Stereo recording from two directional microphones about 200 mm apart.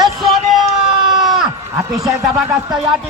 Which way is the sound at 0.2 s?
Centre (ahead or behind).